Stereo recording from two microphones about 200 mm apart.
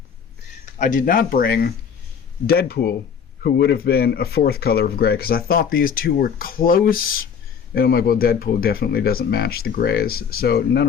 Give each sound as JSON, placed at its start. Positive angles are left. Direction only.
{"t": 0.6, "sound": "speech", "side_deg": 40}